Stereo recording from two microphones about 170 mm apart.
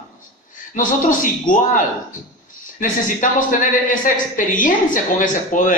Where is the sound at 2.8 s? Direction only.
50° left (ahead or behind).